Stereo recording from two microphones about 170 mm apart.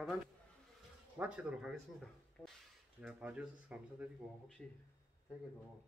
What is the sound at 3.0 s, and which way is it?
Speech, 5° right (ahead or behind).